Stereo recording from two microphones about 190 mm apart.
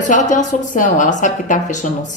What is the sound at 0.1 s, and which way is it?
A woman's voice, 40° left (ahead or behind).